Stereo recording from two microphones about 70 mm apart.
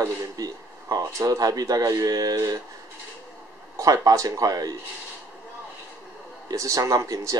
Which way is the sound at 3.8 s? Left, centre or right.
Right.